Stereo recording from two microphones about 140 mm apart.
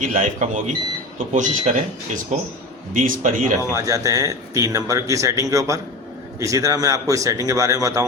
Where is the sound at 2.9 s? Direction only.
70° right (ahead or behind).